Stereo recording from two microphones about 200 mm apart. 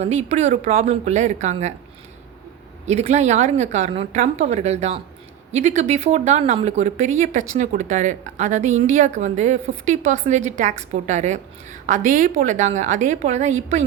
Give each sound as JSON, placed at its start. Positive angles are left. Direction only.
{"t": 0.0, "sound": "a woman's voice", "side_deg": -35}
{"t": 2.8, "sound": "a woman's voice", "side_deg": -35}